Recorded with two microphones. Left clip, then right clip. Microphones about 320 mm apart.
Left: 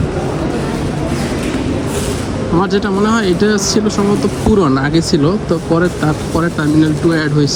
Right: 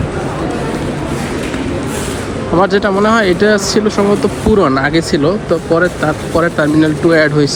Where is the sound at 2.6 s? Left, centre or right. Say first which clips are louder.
Right 4 dB; centre.